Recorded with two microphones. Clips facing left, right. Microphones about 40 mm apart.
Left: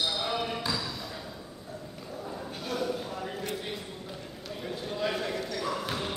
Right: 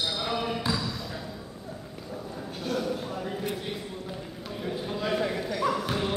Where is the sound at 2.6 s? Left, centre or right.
Centre.